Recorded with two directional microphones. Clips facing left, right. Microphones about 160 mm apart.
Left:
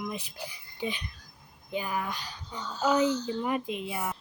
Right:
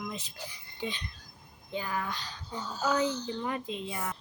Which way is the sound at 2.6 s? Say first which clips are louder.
Left 1 dB; 10° right (ahead or behind).